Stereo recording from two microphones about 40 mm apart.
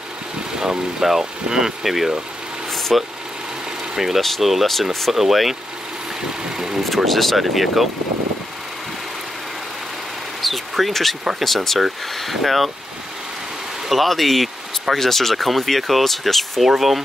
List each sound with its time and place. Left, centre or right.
0.6 s speech: centre
2.7 s vehicle: centre
3.9 s speech: centre
6.5 s vehicle: centre
7.1 s speech: centre
10.4 s a sound: centre
10.9 s speech: centre
13.8 s speech: centre
16.6 s speech: centre